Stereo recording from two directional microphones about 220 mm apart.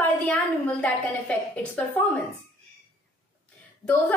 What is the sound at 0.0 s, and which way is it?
A woman's voice, 5° left (ahead or behind).